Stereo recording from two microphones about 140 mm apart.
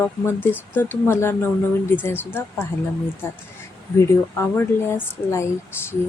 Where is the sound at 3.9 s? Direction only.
15° left (ahead or behind).